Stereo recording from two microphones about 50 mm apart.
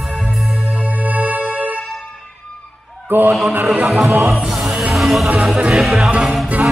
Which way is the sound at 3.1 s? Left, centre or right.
Right.